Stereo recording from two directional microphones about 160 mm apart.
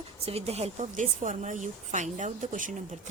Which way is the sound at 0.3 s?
40° right (ahead or behind).